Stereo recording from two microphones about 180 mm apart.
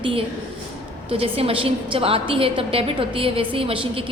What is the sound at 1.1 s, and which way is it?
A woman's voice, 30° right (ahead or behind).